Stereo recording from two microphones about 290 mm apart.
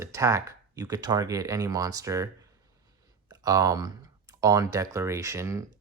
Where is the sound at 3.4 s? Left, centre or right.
Centre.